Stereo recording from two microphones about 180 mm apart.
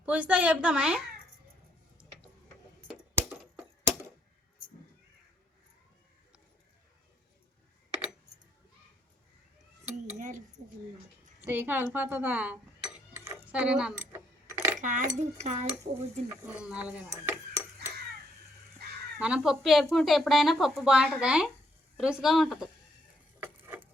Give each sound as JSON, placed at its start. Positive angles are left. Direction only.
{"t": 0.0, "sound": "a woman's voice", "side_deg": -5}
{"t": 3.2, "sound": "a sound", "side_deg": 0}
{"t": 9.9, "sound": "cutlery", "side_deg": -40}
{"t": 11.4, "sound": "speech", "side_deg": -10}
{"t": 14.1, "sound": "a sound", "side_deg": -10}
{"t": 14.8, "sound": "speech", "side_deg": -45}
{"t": 16.6, "sound": "a woman's voice", "side_deg": -5}
{"t": 19.2, "sound": "speech", "side_deg": -5}
{"t": 23.4, "sound": "a sound", "side_deg": -10}